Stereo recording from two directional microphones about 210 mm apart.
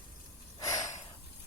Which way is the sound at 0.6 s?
15° left (ahead or behind).